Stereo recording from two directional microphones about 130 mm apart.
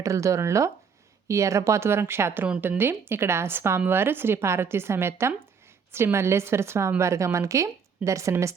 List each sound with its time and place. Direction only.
0.0 s a woman's voice: 25° right (ahead or behind)